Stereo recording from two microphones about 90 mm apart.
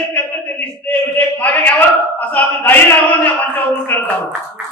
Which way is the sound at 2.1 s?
20° left (ahead or behind).